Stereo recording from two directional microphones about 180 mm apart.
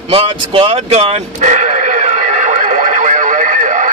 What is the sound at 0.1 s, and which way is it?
Sheep, 30° right (ahead or behind).